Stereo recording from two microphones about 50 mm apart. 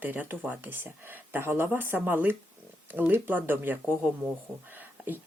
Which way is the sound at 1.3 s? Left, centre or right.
Right.